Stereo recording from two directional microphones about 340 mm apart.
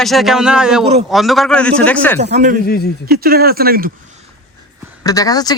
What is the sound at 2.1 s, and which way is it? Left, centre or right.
Speech, centre.